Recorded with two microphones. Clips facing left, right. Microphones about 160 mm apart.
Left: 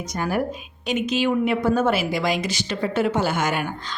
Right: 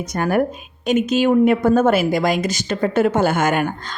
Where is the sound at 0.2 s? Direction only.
55° right (ahead or behind).